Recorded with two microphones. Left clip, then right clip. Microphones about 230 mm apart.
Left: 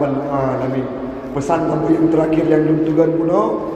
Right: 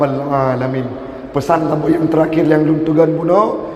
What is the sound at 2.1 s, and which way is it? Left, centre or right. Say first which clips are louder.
A man's voice: right 2 dB; right.